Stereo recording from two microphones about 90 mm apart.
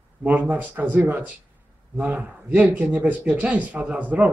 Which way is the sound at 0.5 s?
20° right (ahead or behind).